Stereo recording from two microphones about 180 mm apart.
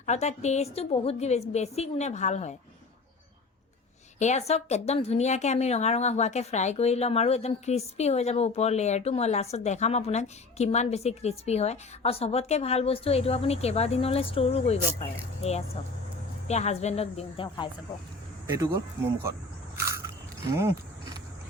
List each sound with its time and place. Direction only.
0.0 s a woman's voice: 40° left (ahead or behind)
4.2 s a woman's voice: 40° left (ahead or behind)
18.4 s speech: 15° right (ahead or behind)
20.5 s a sound: 15° right (ahead or behind)